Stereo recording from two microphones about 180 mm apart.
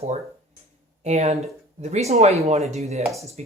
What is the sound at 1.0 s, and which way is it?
Speech, 40° right (ahead or behind).